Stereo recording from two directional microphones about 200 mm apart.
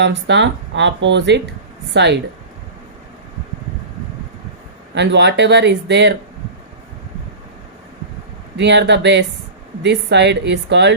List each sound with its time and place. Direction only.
0.0 s speech: 60° right (ahead or behind)
4.9 s speech: 60° right (ahead or behind)
8.5 s speech: 60° right (ahead or behind)